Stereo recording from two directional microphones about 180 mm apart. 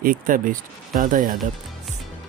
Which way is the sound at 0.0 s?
50° right (ahead or behind).